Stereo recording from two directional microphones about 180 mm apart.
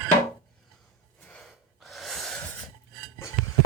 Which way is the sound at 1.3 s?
Centre (ahead or behind).